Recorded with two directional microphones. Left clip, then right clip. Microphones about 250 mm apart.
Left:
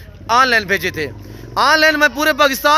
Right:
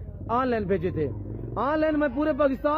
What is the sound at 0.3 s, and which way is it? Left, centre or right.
Speech, centre.